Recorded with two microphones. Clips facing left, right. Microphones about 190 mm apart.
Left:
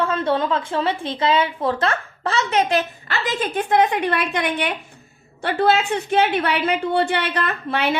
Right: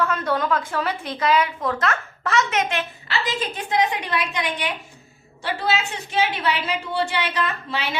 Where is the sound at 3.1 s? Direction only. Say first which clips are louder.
Even; 55° left (ahead or behind).